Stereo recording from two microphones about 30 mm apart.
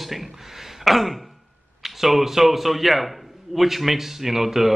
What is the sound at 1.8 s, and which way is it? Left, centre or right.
A man's voice, centre.